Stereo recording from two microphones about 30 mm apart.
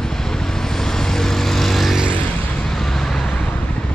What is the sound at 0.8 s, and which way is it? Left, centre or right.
Vehicle, centre.